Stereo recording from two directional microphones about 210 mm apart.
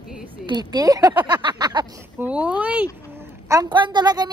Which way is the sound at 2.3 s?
5° right (ahead or behind).